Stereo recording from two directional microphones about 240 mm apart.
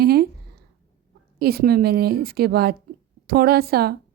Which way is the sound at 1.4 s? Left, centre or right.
Right.